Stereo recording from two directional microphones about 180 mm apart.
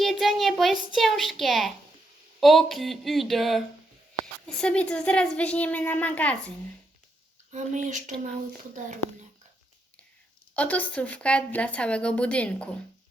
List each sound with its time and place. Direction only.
0.0 s a woman's voice: centre (ahead or behind)
7.5 s speech: 45° right (ahead or behind)
10.5 s a woman's voice: 10° left (ahead or behind)